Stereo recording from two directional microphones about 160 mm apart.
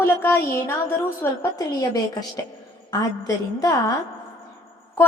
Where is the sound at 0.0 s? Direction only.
15° left (ahead or behind).